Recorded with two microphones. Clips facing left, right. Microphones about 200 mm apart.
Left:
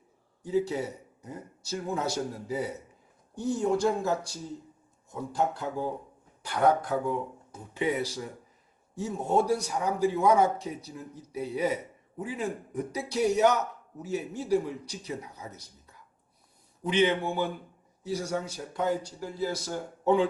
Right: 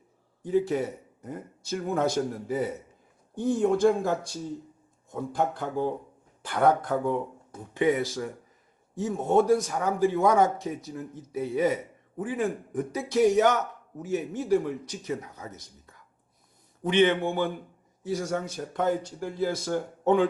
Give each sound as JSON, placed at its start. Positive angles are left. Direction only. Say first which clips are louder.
{"t": 0.4, "sound": "speech", "louder": "right 3 dB", "side_deg": -55}
{"t": 16.8, "sound": "a man's voice", "louder": "right 3 dB", "side_deg": -55}